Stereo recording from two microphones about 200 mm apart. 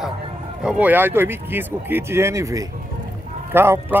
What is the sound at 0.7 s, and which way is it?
A man's voice, 10° right (ahead or behind).